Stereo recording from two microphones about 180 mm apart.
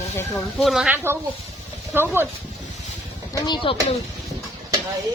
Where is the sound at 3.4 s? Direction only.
25° left (ahead or behind).